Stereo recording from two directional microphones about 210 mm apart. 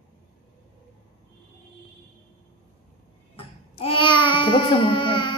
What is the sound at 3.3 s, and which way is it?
Babbling, 25° left (ahead or behind).